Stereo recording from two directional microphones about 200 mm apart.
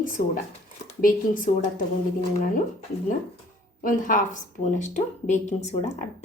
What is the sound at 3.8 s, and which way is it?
Speech, 40° left (ahead or behind).